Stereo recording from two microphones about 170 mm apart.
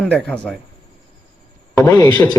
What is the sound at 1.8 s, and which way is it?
Speech, 20° left (ahead or behind).